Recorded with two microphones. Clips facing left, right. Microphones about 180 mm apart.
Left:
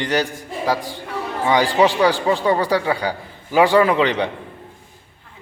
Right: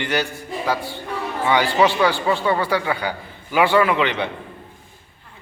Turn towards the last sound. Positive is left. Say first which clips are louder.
# left 3 dB
turn(degrees=35)  # may be behind; listen again after turning